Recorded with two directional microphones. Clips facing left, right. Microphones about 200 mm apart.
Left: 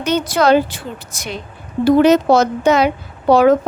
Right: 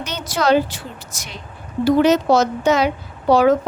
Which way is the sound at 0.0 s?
55° left (ahead or behind).